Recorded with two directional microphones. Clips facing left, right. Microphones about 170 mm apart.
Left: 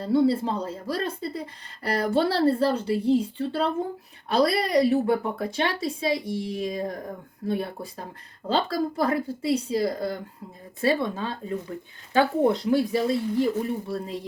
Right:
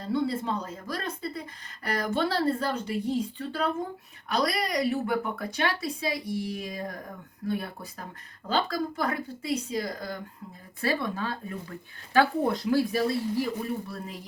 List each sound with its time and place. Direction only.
0.0 s a woman's voice: 30° left (ahead or behind)